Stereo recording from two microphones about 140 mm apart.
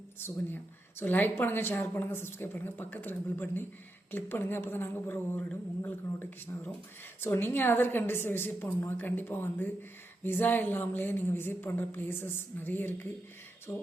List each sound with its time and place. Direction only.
0.2 s a woman's voice: 15° left (ahead or behind)